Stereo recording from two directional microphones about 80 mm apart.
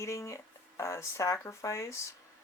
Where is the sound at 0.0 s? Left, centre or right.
Left.